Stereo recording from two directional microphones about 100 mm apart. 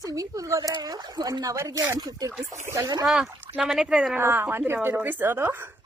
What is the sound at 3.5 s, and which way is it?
Speech, 5° right (ahead or behind).